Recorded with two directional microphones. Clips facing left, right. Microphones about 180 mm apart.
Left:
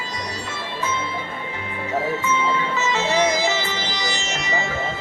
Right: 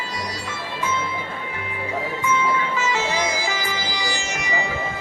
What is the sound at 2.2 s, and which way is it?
Music, 10° right (ahead or behind).